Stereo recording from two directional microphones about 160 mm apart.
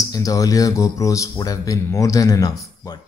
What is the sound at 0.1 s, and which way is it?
Speech, 20° left (ahead or behind).